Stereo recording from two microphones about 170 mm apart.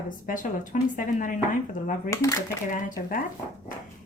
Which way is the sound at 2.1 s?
20° left (ahead or behind).